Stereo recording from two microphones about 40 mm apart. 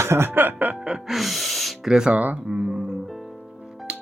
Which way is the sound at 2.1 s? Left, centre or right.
Right.